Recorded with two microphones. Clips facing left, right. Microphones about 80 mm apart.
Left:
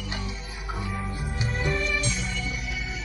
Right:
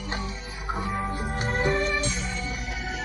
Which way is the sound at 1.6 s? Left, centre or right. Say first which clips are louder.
Right 3 dB; right.